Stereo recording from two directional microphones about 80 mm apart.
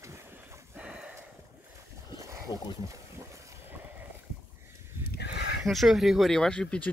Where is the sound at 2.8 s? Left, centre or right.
Right.